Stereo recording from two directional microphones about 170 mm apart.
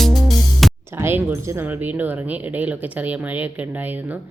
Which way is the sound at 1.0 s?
15° right (ahead or behind).